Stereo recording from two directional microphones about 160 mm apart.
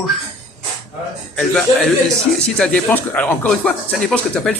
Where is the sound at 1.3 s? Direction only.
5° left (ahead or behind).